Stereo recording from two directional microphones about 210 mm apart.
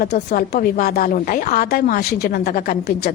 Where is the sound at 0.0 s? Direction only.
45° left (ahead or behind).